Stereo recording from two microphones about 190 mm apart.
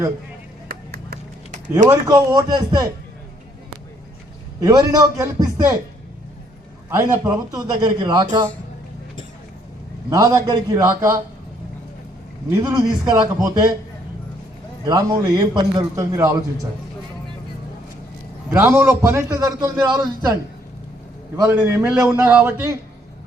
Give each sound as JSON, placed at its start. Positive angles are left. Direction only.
{"t": 0.7, "sound": "vehicle", "side_deg": -55}
{"t": 1.9, "sound": "a man's voice", "side_deg": -20}
{"t": 4.6, "sound": "a man's voice", "side_deg": -20}
{"t": 6.9, "sound": "a man's voice", "side_deg": -15}
{"t": 10.1, "sound": "a man's voice", "side_deg": -20}
{"t": 12.5, "sound": "a man's voice", "side_deg": -10}
{"t": 13.1, "sound": "a man's voice", "side_deg": -20}
{"t": 14.8, "sound": "a man's voice", "side_deg": -20}
{"t": 18.5, "sound": "a man's voice", "side_deg": -10}
{"t": 21.3, "sound": "a man's voice", "side_deg": -10}